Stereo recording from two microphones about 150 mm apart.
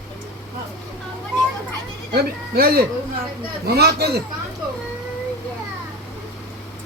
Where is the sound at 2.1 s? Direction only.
90° right.